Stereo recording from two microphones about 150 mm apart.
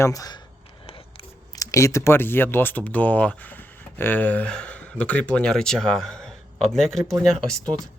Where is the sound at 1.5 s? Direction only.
20° left (ahead or behind); by 7.1 s centre (ahead or behind).